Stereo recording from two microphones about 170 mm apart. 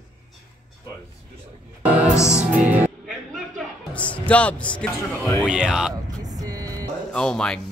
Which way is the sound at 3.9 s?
5° left (ahead or behind).